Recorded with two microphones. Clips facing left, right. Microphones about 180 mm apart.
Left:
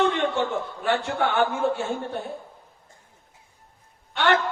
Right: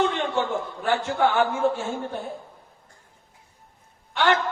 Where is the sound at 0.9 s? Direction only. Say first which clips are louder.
Right 2 dB; 60° left (ahead or behind).